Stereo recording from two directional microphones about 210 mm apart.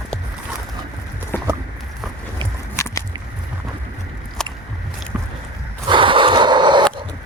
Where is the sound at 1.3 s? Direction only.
10° left (ahead or behind).